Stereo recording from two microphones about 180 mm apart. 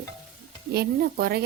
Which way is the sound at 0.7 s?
60° right (ahead or behind).